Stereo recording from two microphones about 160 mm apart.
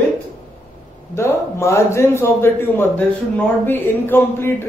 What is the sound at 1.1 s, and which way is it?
A man's voice, 15° left (ahead or behind).